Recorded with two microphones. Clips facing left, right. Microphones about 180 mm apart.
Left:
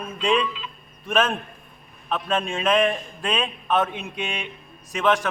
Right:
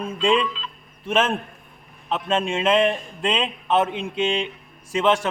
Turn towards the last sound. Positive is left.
turn(degrees=-25)  # may be behind; listen again after turning